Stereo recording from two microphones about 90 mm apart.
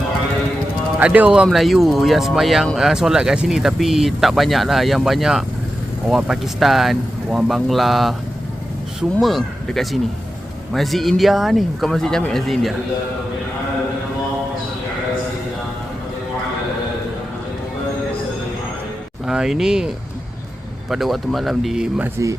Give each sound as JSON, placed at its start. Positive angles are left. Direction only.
{"t": 0.9, "sound": "speech", "side_deg": -15}
{"t": 1.5, "sound": "speech", "side_deg": 0}
{"t": 9.2, "sound": "speech", "side_deg": 5}
{"t": 19.2, "sound": "speech", "side_deg": -5}
{"t": 20.9, "sound": "speech", "side_deg": 0}
{"t": 22.2, "sound": "speech", "side_deg": -35}